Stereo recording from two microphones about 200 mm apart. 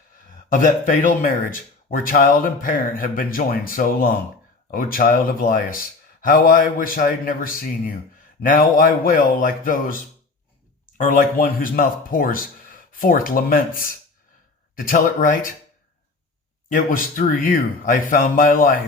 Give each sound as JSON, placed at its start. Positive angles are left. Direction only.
{"t": 0.5, "sound": "speech", "side_deg": 40}
{"t": 14.8, "sound": "speech", "side_deg": 45}
{"t": 16.6, "sound": "speech", "side_deg": 40}